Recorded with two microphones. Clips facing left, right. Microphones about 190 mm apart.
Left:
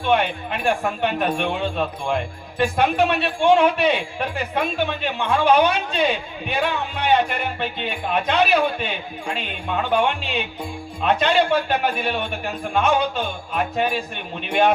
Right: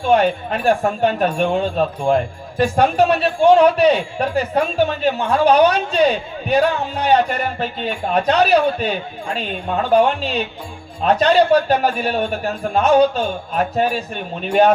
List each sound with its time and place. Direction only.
0.0 s speech: 40° right (ahead or behind)